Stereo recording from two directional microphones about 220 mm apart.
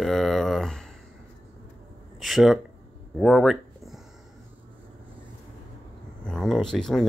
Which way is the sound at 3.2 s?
Centre (ahead or behind).